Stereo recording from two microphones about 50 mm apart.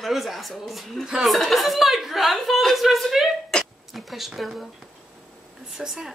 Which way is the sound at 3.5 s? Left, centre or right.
Centre.